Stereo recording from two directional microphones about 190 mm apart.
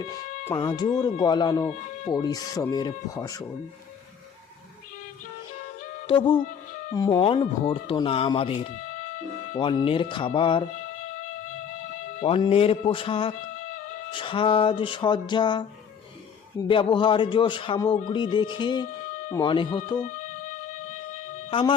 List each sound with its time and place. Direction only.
0.0 s speech: 20° left (ahead or behind)
6.1 s speech: 25° left (ahead or behind)
12.2 s speech: 30° left (ahead or behind)
21.5 s speech: 25° left (ahead or behind)